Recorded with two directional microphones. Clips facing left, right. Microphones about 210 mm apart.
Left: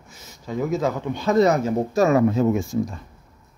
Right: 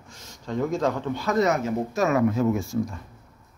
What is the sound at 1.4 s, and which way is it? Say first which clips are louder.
Speech: left 5 dB; 35° left (ahead or behind).